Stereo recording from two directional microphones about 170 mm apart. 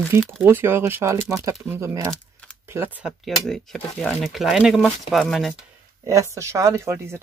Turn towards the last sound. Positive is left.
turn(degrees=-15)  # may be behind; listen again after turning